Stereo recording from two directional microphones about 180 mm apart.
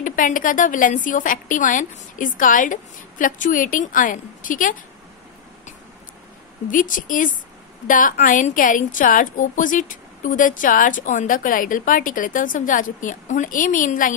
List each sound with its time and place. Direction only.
0.0 s a woman's voice: 45° left (ahead or behind)
6.7 s a woman's voice: 45° left (ahead or behind)